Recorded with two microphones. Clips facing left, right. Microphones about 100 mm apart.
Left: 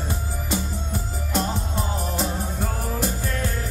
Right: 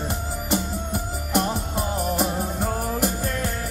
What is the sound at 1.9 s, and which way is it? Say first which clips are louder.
Music: right 3 dB; 15° right (ahead or behind).